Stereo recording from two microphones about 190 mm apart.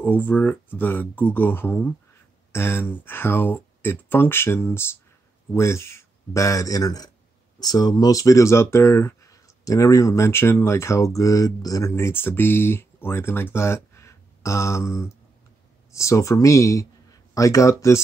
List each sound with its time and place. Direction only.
0.0 s speech: 10° left (ahead or behind)